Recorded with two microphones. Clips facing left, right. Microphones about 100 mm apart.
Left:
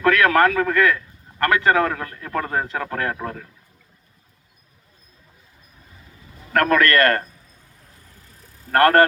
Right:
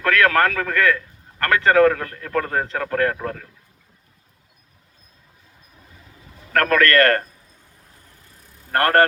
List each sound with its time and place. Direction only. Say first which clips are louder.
0.0 s a man's voice: left 1 dB; 20° left (ahead or behind)
6.5 s a man's voice: even; 20° left (ahead or behind)
8.7 s a man's voice: left 2 dB; 25° left (ahead or behind)